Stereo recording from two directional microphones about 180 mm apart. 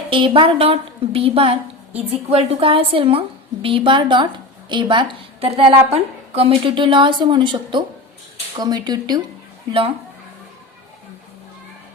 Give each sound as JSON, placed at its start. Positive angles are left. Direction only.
{"t": 0.1, "sound": "a woman's voice", "side_deg": -30}